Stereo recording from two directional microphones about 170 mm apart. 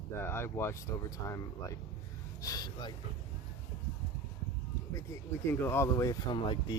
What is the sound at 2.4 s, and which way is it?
Speech, 20° left (ahead or behind).